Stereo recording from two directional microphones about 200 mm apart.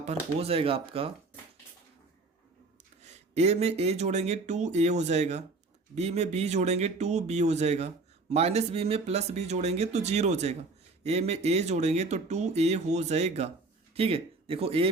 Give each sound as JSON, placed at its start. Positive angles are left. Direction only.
{"t": 0.0, "sound": "speech", "side_deg": -30}
{"t": 3.0, "sound": "speech", "side_deg": -35}